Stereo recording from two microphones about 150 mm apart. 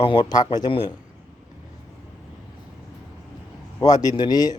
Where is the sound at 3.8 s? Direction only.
25° left (ahead or behind).